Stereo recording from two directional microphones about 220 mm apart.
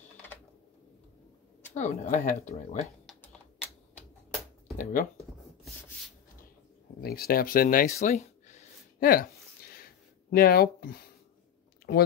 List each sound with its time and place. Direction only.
1.7 s speech: 30° left (ahead or behind)
3.1 s typing: 5° left (ahead or behind)
7.0 s a sound: 45° left (ahead or behind)
10.3 s speech: 45° left (ahead or behind)